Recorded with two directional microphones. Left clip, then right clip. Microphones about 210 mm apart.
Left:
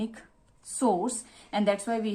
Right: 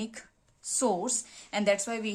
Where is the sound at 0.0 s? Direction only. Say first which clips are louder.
Left 3 dB; 25° right (ahead or behind).